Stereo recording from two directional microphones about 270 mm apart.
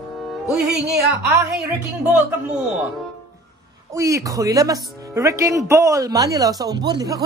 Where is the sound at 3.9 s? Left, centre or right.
Centre.